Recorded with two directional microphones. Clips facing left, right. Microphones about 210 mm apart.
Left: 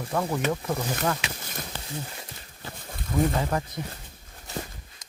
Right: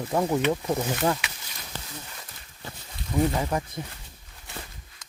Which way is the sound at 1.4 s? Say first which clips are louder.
Left 8 dB; 50° left (ahead or behind).